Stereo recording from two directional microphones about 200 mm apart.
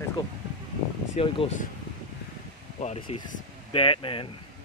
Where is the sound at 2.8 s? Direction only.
30° left (ahead or behind).